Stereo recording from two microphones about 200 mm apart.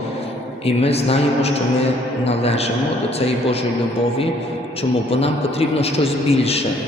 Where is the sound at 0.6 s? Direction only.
30° left (ahead or behind).